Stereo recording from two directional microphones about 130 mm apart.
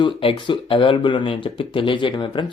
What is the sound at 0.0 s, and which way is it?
Speech, 40° left (ahead or behind).